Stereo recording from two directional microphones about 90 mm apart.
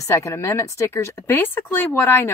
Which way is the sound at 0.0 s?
30° left (ahead or behind).